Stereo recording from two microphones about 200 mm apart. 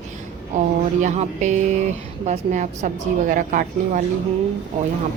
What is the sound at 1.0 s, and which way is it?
A woman's voice, 35° right (ahead or behind).